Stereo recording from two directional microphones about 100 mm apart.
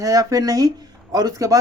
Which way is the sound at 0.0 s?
35° right (ahead or behind).